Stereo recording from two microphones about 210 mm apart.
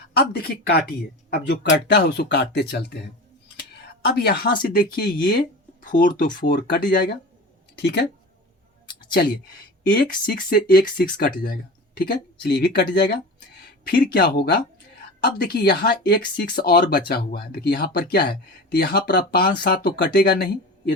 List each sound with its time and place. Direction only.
0.2 s speech: 50° left (ahead or behind)
4.0 s speech: 50° left (ahead or behind)
9.1 s speech: 45° left (ahead or behind)